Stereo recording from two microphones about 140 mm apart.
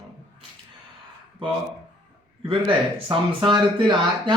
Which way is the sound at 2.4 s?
40° right (ahead or behind).